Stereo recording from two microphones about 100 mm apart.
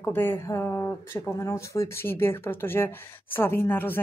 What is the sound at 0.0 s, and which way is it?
Speech, 20° left (ahead or behind).